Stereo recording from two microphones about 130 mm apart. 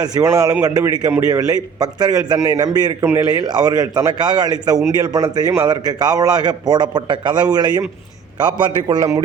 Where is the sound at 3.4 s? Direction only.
30° right (ahead or behind).